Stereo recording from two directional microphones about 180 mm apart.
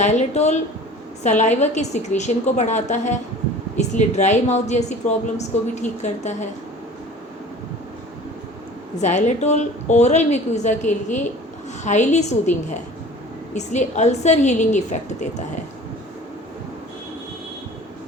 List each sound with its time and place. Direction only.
0.0 s a woman's voice: 40° left (ahead or behind)
9.0 s a woman's voice: 40° left (ahead or behind)